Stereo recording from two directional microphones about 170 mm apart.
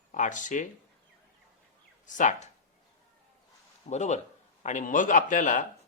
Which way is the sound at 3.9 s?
45° left (ahead or behind).